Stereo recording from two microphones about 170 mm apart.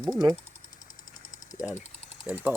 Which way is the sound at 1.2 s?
20° left (ahead or behind).